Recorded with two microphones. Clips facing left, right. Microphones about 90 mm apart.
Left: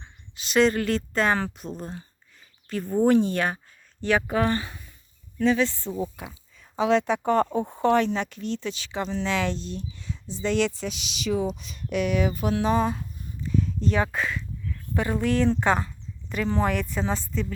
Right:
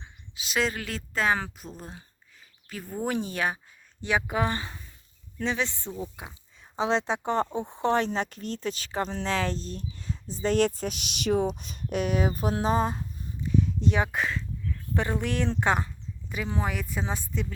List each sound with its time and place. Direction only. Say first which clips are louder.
0.0 s speech: right 1 dB; 5° right (ahead or behind); by 13.1 s 35° right (ahead or behind)
13.6 s speech: left 1 dB; 20° right (ahead or behind)
16.3 s speech: left 6 dB; 10° right (ahead or behind)